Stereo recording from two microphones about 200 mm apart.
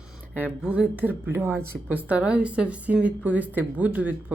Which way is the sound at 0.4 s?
5° right (ahead or behind).